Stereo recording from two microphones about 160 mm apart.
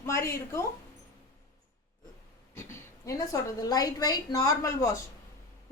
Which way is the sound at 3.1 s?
20° left (ahead or behind).